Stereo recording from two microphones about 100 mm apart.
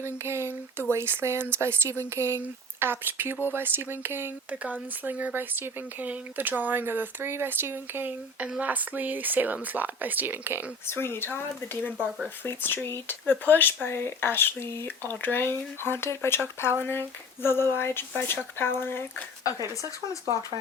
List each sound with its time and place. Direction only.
0.3 s speech: 25° right (ahead or behind)
10.8 s speech: 25° left (ahead or behind)
11.9 s speech: 10° right (ahead or behind)
12.5 s speech: 20° left (ahead or behind)
19.5 s speech: 40° right (ahead or behind)